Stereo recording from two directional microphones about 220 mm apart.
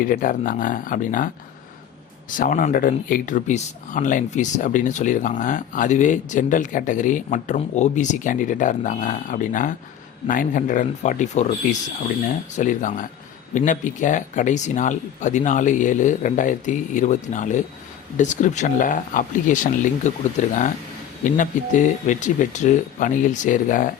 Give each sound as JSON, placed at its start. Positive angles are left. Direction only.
{"t": 0.0, "sound": "speech", "side_deg": 40}
{"t": 2.4, "sound": "speech", "side_deg": 35}
{"t": 12.5, "sound": "speech", "side_deg": 35}